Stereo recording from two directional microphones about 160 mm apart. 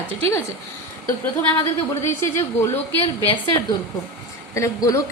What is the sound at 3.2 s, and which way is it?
Speech, 30° left (ahead or behind).